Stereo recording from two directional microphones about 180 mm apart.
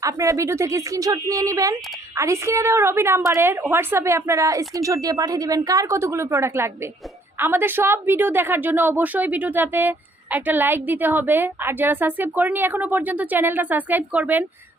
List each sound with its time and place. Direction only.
0.0 s a woman's voice: 20° right (ahead or behind)